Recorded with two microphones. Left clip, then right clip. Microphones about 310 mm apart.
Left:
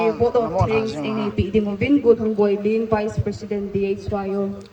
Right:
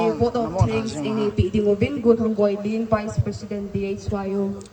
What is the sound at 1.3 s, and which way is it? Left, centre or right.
A woman's voice, left.